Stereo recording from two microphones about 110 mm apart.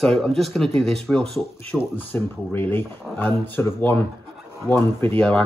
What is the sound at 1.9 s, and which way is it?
Speech, 15° left (ahead or behind).